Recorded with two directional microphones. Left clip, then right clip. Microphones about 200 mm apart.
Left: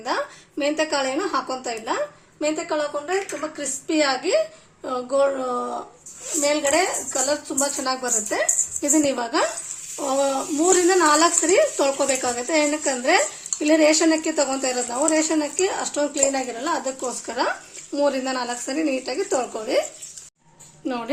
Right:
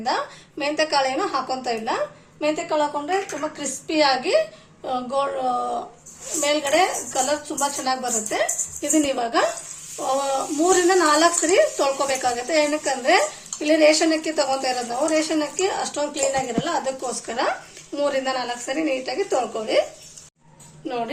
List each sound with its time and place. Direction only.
0.6 s a woman's voice: 50° left (ahead or behind)
20.8 s a woman's voice: 55° left (ahead or behind)